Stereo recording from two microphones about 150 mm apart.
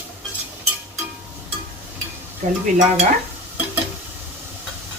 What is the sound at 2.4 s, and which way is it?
Speech, 55° right (ahead or behind).